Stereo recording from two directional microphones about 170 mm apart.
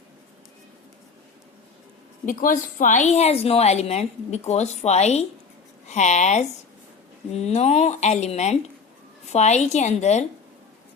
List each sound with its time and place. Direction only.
2.2 s a woman's voice: 50° left (ahead or behind)